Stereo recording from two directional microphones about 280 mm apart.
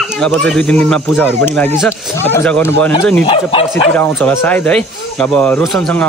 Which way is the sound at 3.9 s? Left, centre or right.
Centre.